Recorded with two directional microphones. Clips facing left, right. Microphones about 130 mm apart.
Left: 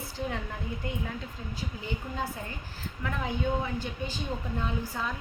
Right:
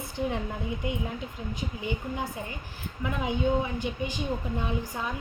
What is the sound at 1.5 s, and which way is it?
Speech, 15° right (ahead or behind).